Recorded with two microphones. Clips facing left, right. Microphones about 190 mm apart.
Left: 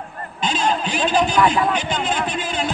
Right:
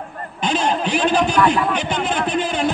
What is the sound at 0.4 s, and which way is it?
A man's voice, 60° right (ahead or behind).